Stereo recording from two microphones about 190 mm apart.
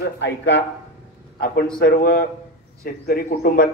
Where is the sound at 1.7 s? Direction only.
55° left (ahead or behind).